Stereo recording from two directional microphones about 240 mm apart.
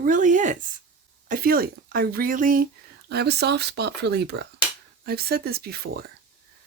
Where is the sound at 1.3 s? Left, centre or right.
Right.